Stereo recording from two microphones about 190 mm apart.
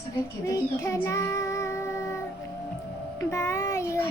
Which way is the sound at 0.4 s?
15° left (ahead or behind).